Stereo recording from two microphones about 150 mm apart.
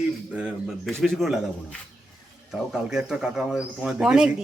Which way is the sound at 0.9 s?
Centre (ahead or behind).